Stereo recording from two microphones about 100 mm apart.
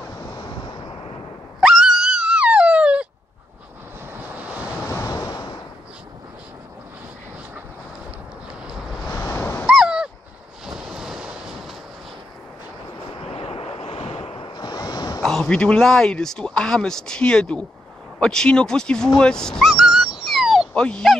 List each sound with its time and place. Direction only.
0.3 s waves: 45° left (ahead or behind)
1.6 s a sound: 5° right (ahead or behind)
4.4 s vehicle: 15° right (ahead or behind)
4.8 s waves: 30° left (ahead or behind)
8.6 s vehicle: centre (ahead or behind)
9.1 s a sound: 25° left (ahead or behind)
9.7 s a sound: 5° right (ahead or behind)
10.7 s waves: 5° right (ahead or behind)
13.2 s waves: 70° left (ahead or behind); by 15.2 s 40° left (ahead or behind)
15.2 s speech: 5° left (ahead or behind)
19.7 s dog: 5° right (ahead or behind)
20.7 s speech: 10° left (ahead or behind)